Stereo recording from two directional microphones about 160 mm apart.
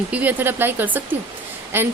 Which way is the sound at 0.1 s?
10° right (ahead or behind).